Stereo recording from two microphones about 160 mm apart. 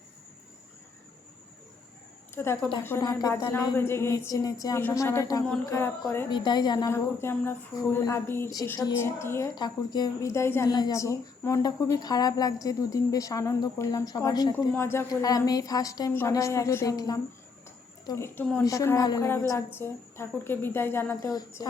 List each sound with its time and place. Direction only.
2.3 s a woman's voice: 15° left (ahead or behind)
21.2 s a woman's voice: 25° left (ahead or behind)